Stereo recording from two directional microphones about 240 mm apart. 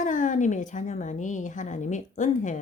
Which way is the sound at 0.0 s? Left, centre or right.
Left.